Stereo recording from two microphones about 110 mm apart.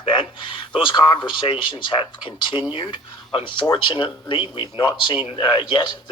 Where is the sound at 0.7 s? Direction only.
45° left (ahead or behind).